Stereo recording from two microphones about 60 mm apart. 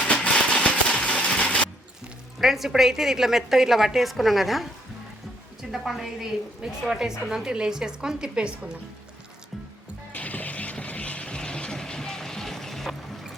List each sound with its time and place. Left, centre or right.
0.0 s a sound: centre
2.4 s a woman's voice: centre
5.7 s a woman's voice: centre
10.1 s vehicle: left; by 13.2 s centre